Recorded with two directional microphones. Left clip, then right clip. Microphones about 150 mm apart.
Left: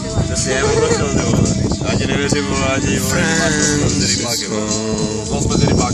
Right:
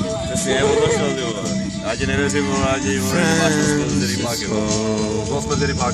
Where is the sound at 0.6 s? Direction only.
45° right (ahead or behind).